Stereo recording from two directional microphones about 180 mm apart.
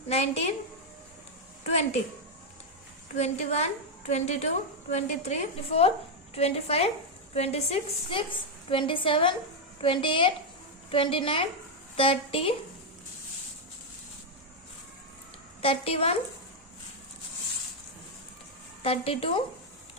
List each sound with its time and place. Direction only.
0.1 s a woman's voice: 35° left (ahead or behind)
3.2 s a woman's voice: 40° left (ahead or behind)
15.6 s a woman's voice: 30° left (ahead or behind)
18.8 s a woman's voice: 35° left (ahead or behind)